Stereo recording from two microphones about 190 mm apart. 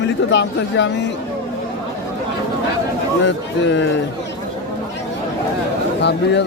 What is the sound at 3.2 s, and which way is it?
Speech, 70° left (ahead or behind).